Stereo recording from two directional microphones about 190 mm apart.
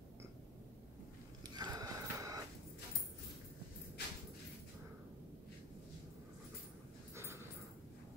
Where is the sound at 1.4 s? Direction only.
20° right (ahead or behind).